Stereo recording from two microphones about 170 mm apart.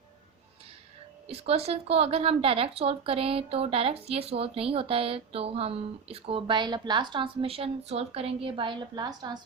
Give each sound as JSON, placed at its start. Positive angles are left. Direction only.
{"t": 1.3, "sound": "a woman's voice", "side_deg": -35}